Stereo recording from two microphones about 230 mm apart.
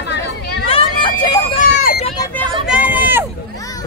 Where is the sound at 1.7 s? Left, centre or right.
Left.